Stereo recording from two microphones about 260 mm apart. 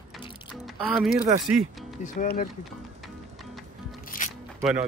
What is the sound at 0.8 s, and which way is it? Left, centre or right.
Speech, centre.